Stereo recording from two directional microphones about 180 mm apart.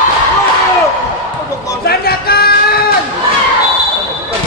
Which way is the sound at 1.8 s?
60° left (ahead or behind).